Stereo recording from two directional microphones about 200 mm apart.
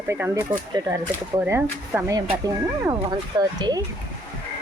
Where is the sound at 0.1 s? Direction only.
10° right (ahead or behind).